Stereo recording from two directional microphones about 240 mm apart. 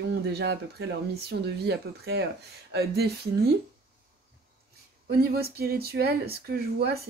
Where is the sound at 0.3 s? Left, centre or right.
Right.